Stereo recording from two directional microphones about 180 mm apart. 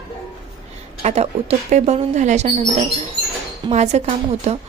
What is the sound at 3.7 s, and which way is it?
Speech, 40° right (ahead or behind).